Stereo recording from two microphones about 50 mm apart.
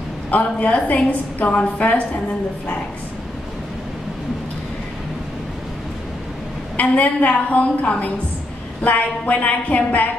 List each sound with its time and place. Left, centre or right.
0.3 s a woman's voice: left
6.8 s a woman's voice: left